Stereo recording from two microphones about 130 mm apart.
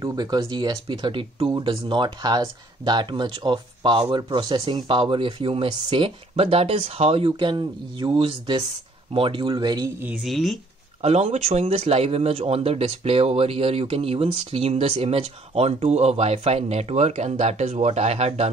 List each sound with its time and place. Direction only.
0.0 s a man's voice: 30° right (ahead or behind)
10.2 s speech: centre (ahead or behind)
11.0 s a man's voice: 55° right (ahead or behind)